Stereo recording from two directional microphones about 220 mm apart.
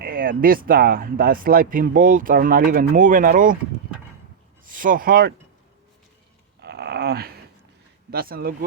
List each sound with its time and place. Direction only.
0.0 s speech: 40° right (ahead or behind)
4.6 s speech: 40° right (ahead or behind)
6.6 s dog: 50° right (ahead or behind)
8.1 s speech: 45° right (ahead or behind)